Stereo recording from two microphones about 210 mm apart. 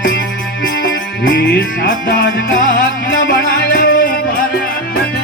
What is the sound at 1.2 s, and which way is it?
Music, 45° left (ahead or behind).